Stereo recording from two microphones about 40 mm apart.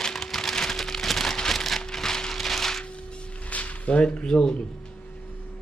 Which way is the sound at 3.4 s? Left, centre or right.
Left.